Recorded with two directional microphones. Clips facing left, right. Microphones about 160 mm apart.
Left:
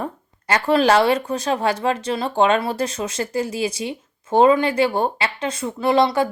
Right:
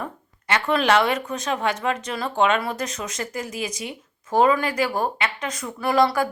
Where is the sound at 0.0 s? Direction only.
35° left (ahead or behind).